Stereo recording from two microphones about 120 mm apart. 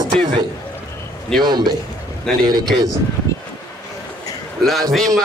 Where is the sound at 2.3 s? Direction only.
5° left (ahead or behind).